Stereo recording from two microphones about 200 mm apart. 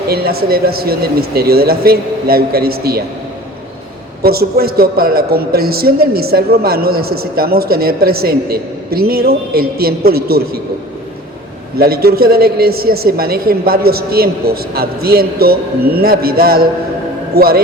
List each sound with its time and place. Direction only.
0.1 s speech: 50° right (ahead or behind)
4.2 s speech: 50° right (ahead or behind)
11.8 s speech: 50° right (ahead or behind)